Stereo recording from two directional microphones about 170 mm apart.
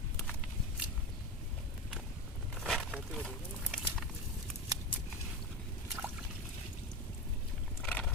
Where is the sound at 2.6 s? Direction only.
Centre (ahead or behind).